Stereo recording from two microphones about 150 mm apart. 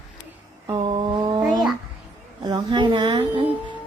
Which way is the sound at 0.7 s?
35° right (ahead or behind).